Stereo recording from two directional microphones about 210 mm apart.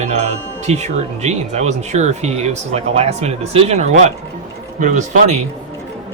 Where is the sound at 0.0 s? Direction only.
30° right (ahead or behind).